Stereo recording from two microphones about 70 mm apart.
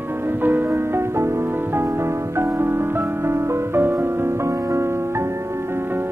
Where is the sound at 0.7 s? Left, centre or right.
Right.